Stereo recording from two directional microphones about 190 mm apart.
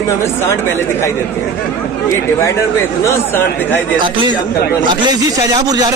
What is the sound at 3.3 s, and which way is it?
Speech, 10° left (ahead or behind).